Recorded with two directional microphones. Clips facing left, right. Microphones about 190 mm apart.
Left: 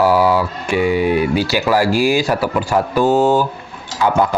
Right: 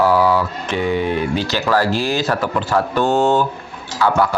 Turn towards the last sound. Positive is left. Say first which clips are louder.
# left 1 dB
turn(degrees=20)  # may be behind; listen again after turning